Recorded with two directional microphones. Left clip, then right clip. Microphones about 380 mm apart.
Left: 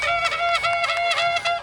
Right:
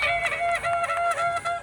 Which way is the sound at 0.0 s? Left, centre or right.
Centre.